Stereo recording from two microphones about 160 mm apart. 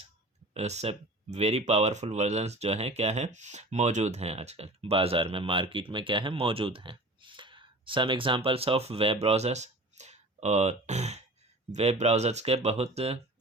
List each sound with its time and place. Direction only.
0.5 s speech: 45° right (ahead or behind)